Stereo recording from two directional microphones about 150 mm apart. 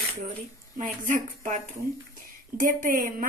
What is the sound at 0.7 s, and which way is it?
Speech, 60° right (ahead or behind).